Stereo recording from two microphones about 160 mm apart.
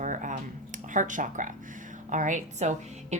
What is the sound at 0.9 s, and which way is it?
A woman's voice, 55° right (ahead or behind).